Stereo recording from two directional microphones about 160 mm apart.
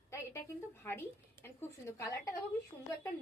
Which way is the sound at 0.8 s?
15° left (ahead or behind).